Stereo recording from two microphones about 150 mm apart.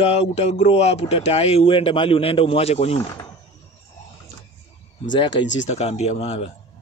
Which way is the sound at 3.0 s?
20° left (ahead or behind).